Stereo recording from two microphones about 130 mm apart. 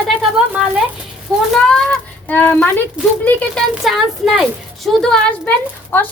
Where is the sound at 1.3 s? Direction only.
Centre (ahead or behind).